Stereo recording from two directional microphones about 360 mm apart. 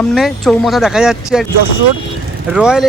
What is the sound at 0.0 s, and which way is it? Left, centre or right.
Speech, centre.